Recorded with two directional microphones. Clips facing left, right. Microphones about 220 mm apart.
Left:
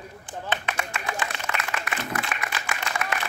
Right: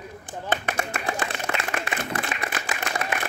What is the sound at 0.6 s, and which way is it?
Clapping, 40° right (ahead or behind).